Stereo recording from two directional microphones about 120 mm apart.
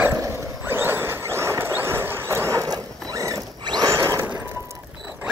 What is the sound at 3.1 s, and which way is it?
Mechanisms, 30° right (ahead or behind).